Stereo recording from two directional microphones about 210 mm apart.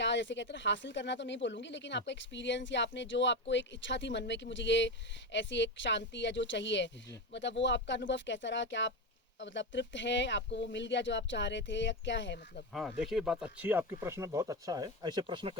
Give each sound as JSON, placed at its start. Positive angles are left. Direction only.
{"t": 0.0, "sound": "speech", "side_deg": 60}
{"t": 12.7, "sound": "speech", "side_deg": 0}